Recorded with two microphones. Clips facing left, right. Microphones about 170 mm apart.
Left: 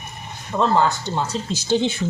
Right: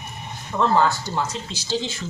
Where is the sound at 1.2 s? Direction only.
35° left (ahead or behind).